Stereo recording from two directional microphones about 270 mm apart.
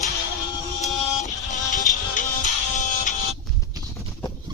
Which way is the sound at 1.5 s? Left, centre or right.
Left.